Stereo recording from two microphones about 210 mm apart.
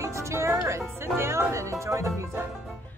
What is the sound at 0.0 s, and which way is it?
Music, 15° right (ahead or behind).